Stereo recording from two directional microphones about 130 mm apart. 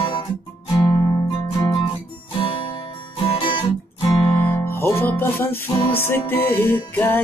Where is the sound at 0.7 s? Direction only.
30° left (ahead or behind).